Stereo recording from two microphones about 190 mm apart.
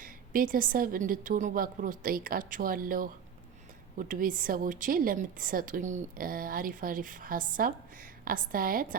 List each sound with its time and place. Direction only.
0.0 s a woman's voice: 45° right (ahead or behind)